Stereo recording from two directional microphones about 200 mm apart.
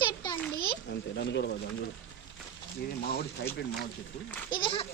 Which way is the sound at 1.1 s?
60° left (ahead or behind).